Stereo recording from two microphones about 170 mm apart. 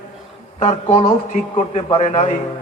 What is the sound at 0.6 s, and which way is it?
A woman's voice, 35° left (ahead or behind).